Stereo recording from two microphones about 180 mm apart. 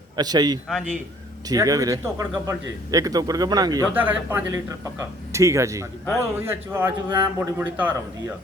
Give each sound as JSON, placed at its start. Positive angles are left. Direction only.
{"t": 0.2, "sound": "speech", "side_deg": -20}
{"t": 0.7, "sound": "a man's voice", "side_deg": 5}
{"t": 1.5, "sound": "speech", "side_deg": -20}
{"t": 3.9, "sound": "a man's voice", "side_deg": -10}